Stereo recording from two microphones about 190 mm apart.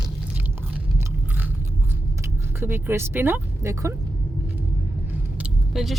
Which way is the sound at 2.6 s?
15° right (ahead or behind).